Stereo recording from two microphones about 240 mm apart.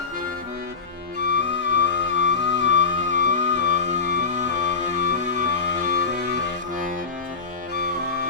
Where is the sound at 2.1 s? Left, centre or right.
Left.